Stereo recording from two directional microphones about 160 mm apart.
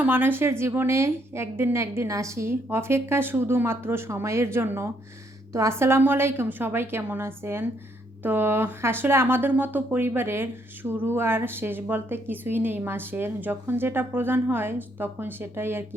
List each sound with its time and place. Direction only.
0.0 s a woman's voice: 10° right (ahead or behind)